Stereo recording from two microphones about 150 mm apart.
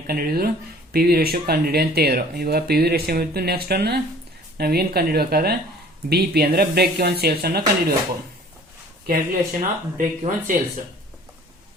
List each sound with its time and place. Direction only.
0.1 s speech: 90° right
9.6 s speech: 60° right (ahead or behind)